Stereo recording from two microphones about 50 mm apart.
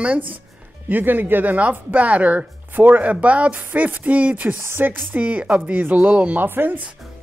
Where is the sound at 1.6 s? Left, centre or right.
Right.